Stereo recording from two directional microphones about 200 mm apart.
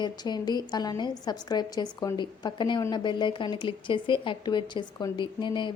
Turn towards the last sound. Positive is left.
turn(degrees=25)  # may be behind; listen again after turning